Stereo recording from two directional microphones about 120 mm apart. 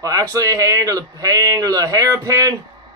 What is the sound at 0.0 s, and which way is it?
Speech, 30° right (ahead or behind).